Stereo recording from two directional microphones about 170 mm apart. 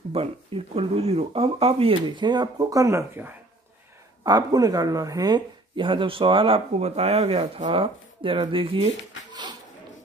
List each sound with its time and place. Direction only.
0.2 s speech: 35° right (ahead or behind)